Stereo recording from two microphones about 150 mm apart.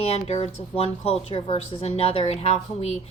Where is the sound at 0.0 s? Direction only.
45° left (ahead or behind).